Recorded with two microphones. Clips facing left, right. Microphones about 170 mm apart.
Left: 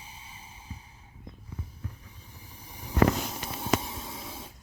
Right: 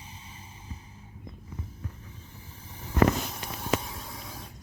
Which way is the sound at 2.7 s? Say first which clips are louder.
Left 1 dB; 15° left (ahead or behind).